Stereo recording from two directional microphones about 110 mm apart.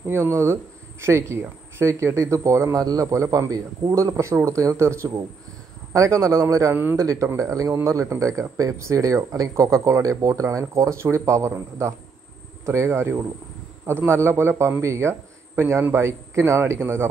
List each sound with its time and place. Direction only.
0.0 s speech: 20° right (ahead or behind)